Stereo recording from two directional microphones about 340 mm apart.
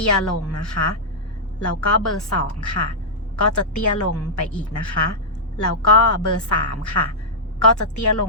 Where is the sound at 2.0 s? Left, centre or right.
Left.